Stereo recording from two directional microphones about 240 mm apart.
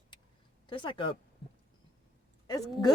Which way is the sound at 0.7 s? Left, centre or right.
Centre.